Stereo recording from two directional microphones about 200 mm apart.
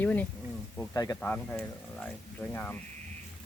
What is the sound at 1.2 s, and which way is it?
Speech, 5° left (ahead or behind).